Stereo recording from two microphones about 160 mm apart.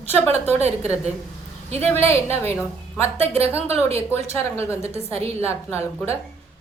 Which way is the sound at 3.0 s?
40° right (ahead or behind).